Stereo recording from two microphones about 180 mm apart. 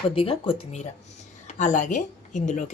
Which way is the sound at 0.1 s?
30° left (ahead or behind).